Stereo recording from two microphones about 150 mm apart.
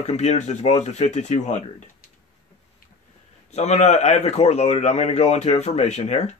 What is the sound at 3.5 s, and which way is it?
Speech, 50° left (ahead or behind).